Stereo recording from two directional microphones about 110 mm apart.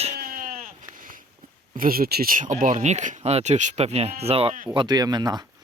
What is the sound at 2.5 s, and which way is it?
Speech, 90° right.